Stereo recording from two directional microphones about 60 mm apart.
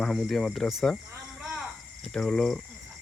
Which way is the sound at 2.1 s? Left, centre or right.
Centre.